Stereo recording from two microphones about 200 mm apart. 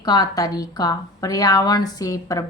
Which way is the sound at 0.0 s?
20° left (ahead or behind).